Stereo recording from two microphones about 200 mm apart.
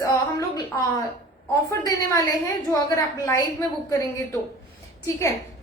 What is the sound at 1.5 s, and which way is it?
A woman's voice, 15° left (ahead or behind).